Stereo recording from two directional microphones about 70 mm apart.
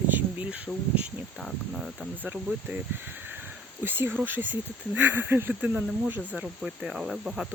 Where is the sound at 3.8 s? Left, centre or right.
Right; by 7.4 s centre.